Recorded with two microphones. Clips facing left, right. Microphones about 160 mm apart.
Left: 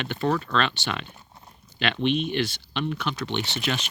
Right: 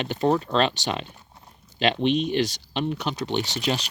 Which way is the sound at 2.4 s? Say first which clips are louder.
Right 2 dB; 40° right (ahead or behind).